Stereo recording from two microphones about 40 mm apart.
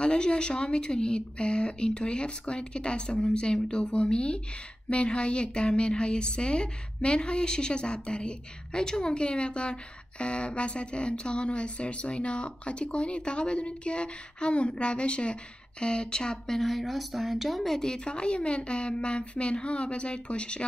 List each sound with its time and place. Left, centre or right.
0.0 s a woman's voice: left
3.8 s a woman's voice: left; by 17.6 s centre
17.6 s a woman's voice: centre; by 20.6 s left